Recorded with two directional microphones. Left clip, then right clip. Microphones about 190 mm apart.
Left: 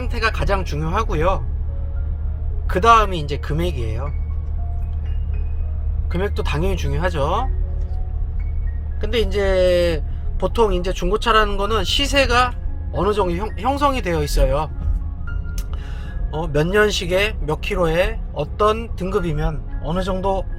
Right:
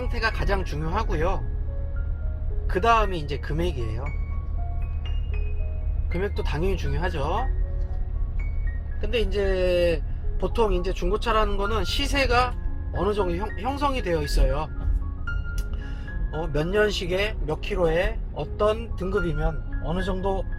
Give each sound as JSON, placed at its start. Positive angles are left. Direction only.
{"t": 0.1, "sound": "speech", "side_deg": 15}
{"t": 2.6, "sound": "speech", "side_deg": 20}
{"t": 6.1, "sound": "speech", "side_deg": 20}
{"t": 9.0, "sound": "speech", "side_deg": 20}
{"t": 16.3, "sound": "speech", "side_deg": 20}